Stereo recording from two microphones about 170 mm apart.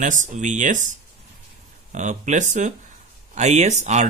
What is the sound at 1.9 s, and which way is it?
Speech, 45° right (ahead or behind).